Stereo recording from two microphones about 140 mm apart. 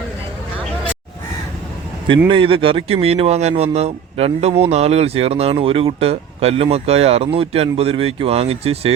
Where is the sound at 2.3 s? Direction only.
40° right (ahead or behind).